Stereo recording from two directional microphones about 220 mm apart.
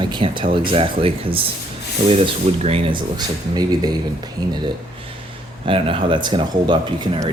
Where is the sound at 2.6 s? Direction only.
25° right (ahead or behind).